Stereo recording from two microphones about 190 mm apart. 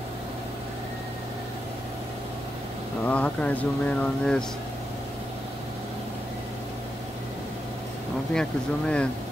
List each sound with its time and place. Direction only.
3.1 s speech: 10° left (ahead or behind)
8.4 s speech: 5° left (ahead or behind)